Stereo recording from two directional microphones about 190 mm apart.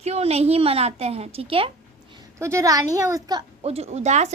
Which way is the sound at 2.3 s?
15° right (ahead or behind).